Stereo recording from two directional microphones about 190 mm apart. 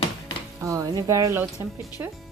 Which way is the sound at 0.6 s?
15° right (ahead or behind).